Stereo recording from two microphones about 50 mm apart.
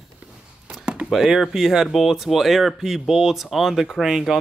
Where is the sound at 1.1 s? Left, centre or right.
Centre.